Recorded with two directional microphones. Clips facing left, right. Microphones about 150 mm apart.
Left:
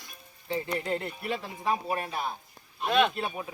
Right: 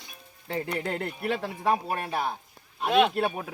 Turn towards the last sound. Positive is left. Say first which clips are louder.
# right 3 dB
turn(degrees=-60)  # may be behind; listen again after turning